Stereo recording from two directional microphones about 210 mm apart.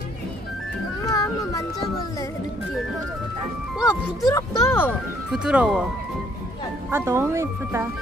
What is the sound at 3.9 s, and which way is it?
Speech, 15° left (ahead or behind).